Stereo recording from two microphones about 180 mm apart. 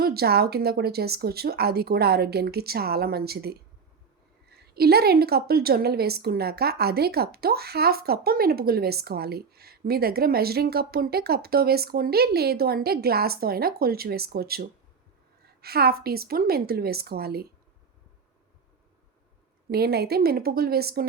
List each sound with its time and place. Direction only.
0.0 s a woman's voice: 60° right (ahead or behind)
19.7 s a woman's voice: 60° right (ahead or behind)